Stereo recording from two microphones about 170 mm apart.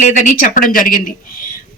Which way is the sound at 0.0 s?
50° left (ahead or behind).